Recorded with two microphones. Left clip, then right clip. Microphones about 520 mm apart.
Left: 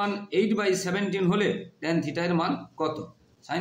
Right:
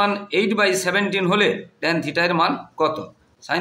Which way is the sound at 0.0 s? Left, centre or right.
Left.